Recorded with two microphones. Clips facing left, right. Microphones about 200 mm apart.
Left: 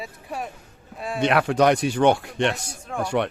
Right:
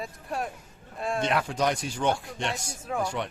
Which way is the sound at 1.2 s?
70° left (ahead or behind).